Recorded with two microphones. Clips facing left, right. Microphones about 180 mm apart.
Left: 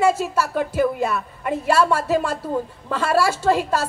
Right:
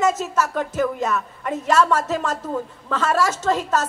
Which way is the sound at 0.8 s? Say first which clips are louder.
Left 1 dB; 35° left (ahead or behind).